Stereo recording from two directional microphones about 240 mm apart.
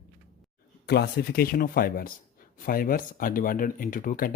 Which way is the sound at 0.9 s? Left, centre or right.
Left.